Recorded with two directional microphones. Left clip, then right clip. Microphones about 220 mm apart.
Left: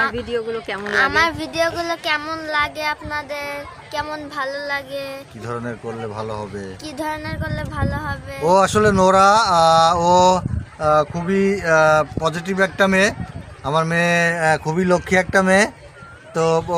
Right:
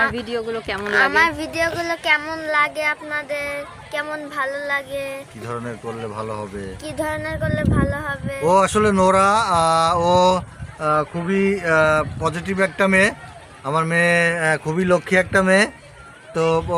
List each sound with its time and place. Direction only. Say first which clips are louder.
0.2 s speech: left 1 dB; 20° right (ahead or behind)
0.9 s speech: right 1 dB; 5° left (ahead or behind)
5.5 s speech: left 2 dB; 20° left (ahead or behind)
6.8 s speech: right 2 dB; 10° left (ahead or behind)
8.4 s speech: left 1 dB; 20° left (ahead or behind)